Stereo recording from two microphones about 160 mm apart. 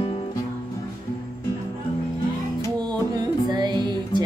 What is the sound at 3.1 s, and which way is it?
Music, 25° right (ahead or behind).